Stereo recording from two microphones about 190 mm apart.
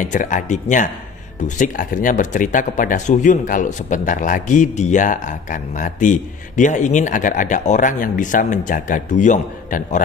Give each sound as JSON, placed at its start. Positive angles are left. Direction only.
{"t": 0.0, "sound": "speech", "side_deg": 40}